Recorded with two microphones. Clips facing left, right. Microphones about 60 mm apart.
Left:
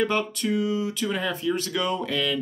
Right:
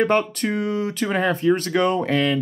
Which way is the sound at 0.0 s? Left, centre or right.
Right.